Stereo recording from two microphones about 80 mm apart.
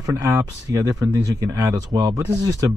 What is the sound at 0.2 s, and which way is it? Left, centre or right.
Speech, right.